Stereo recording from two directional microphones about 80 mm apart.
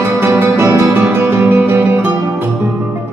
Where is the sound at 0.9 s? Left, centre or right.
Right.